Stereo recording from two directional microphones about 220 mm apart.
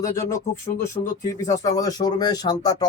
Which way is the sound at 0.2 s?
15° left (ahead or behind).